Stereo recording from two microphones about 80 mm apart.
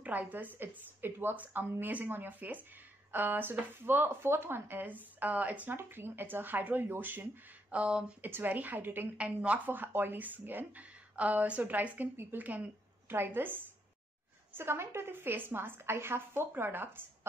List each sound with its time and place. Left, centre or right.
0.0 s speech: centre
7.7 s speech: centre